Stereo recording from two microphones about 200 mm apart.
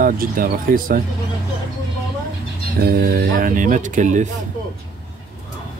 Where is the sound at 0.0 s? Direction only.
45° right (ahead or behind).